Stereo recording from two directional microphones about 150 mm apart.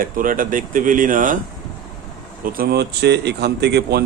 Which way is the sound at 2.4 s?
80° right.